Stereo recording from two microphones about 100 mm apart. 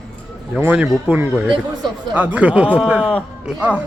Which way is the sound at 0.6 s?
15° right (ahead or behind).